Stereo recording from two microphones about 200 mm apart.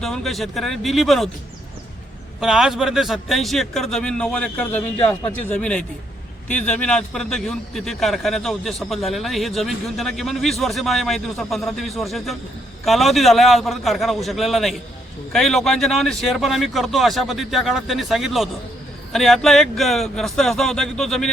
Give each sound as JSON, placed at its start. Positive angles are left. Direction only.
{"t": 0.0, "sound": "a man's voice", "side_deg": 0}
{"t": 2.4, "sound": "a man's voice", "side_deg": 0}